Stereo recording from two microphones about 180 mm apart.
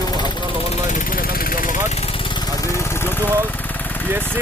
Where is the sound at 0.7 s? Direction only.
45° left (ahead or behind).